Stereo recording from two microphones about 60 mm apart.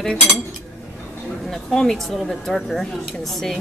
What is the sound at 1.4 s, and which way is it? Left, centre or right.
Speech, centre.